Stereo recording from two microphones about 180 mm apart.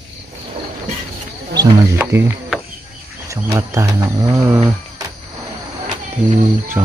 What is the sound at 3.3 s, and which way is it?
Speech, 15° right (ahead or behind).